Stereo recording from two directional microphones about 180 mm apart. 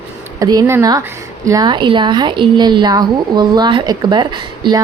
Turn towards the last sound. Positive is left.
turn(degrees=-25)  # may be behind; listen again after turning